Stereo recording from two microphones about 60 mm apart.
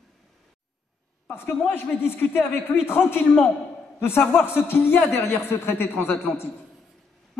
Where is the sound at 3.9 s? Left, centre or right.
Left.